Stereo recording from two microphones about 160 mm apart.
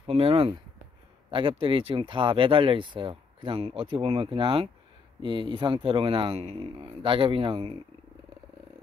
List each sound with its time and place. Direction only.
0.0 s speech: 35° right (ahead or behind)